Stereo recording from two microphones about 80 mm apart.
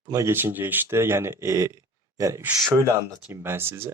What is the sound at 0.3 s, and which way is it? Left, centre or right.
Speech, right.